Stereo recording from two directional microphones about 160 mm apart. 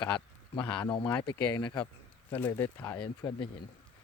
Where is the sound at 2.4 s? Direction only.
10° left (ahead or behind).